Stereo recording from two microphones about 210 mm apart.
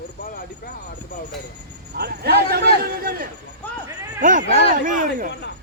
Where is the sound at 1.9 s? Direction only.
50° right (ahead or behind).